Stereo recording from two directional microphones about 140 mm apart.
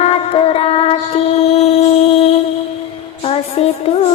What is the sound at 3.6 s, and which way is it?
Music, 45° left (ahead or behind).